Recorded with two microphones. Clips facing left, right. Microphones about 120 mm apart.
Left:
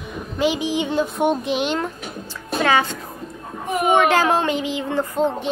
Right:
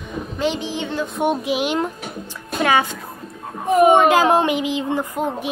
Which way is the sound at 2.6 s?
20° right (ahead or behind).